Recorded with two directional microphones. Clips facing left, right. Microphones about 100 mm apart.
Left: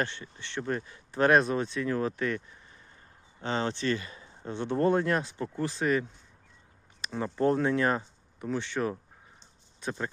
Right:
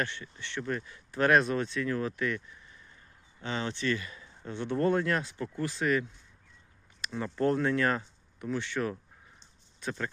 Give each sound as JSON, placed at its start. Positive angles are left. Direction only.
{"t": 0.0, "sound": "speech", "side_deg": 30}
{"t": 7.1, "sound": "speech", "side_deg": 25}